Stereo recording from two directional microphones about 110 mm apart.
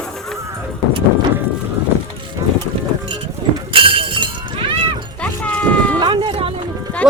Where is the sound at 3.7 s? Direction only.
50° right (ahead or behind).